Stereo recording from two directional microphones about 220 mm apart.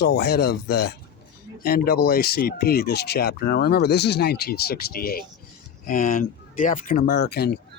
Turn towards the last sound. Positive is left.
turn(degrees=45)  # may be behind; listen again after turning